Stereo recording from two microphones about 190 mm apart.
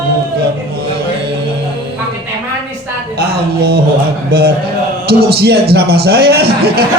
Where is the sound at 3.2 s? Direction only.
60° right (ahead or behind).